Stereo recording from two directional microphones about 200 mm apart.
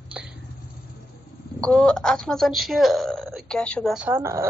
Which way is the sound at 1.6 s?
5° left (ahead or behind).